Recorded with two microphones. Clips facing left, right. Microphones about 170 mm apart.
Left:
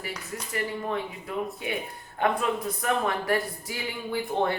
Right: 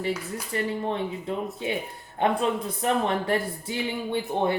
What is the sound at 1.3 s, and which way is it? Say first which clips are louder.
Speech: even; 25° right (ahead or behind).